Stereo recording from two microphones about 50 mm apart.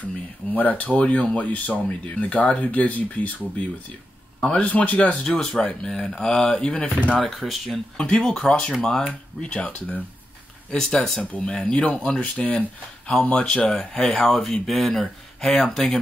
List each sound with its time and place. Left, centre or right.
0.0 s speech: left
5.2 s speech: centre
6.8 s speech: left
7.2 s speech: centre
8.0 s speech: centre; by 10.0 s left
10.7 s speech: centre
13.2 s speech: left
13.5 s speech: centre